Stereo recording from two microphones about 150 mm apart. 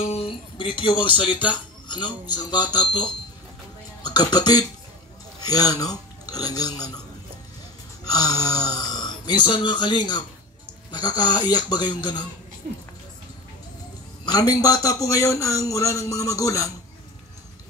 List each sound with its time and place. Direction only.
0.0 s speech: 40° left (ahead or behind); by 7.0 s 25° left (ahead or behind)
8.1 s a man's voice: 25° left (ahead or behind)
14.2 s a man's voice: 25° left (ahead or behind)